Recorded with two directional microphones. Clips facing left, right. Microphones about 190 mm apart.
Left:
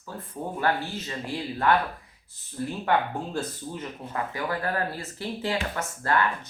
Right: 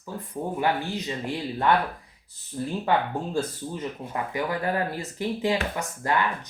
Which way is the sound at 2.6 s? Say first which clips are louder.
Right 1 dB; 15° right (ahead or behind).